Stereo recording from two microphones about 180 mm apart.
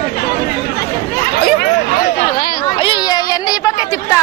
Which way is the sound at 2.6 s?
30° left (ahead or behind).